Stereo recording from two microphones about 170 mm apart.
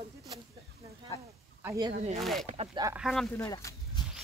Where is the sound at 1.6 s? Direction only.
20° right (ahead or behind).